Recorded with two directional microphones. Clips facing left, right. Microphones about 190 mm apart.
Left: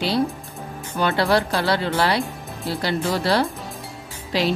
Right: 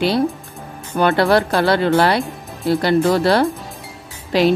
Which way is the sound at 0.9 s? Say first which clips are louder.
Right 5 dB; 55° right (ahead or behind).